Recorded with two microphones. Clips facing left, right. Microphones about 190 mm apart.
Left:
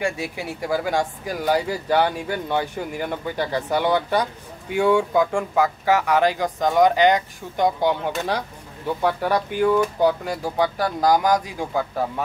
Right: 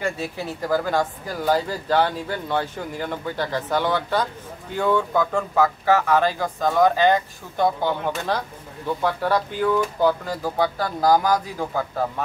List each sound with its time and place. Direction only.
0.0 s speech: 10° left (ahead or behind)